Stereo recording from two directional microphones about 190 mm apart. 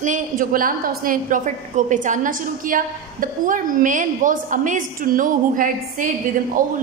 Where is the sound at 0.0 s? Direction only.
45° right (ahead or behind).